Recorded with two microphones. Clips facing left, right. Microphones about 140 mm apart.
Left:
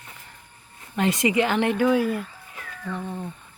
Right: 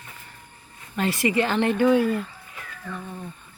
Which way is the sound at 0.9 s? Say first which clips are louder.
Left 1 dB; 20° left (ahead or behind).